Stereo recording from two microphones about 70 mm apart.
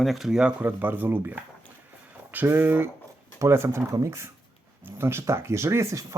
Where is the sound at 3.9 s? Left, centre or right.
Right.